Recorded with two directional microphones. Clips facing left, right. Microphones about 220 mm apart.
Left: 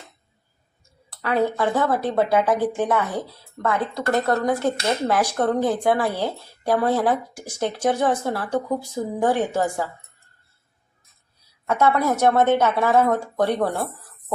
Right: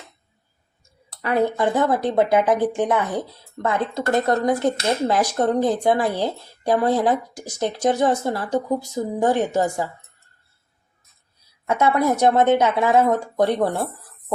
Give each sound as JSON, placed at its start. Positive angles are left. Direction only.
{"t": 1.1, "sound": "speech", "side_deg": -15}
{"t": 11.6, "sound": "speech", "side_deg": -15}